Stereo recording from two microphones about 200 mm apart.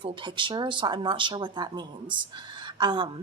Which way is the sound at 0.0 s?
25° right (ahead or behind).